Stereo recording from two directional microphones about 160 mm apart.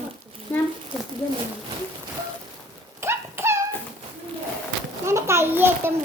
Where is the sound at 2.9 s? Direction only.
15° right (ahead or behind).